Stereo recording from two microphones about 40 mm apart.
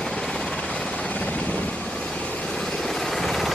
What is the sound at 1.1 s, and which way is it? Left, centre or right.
Helicopter, left.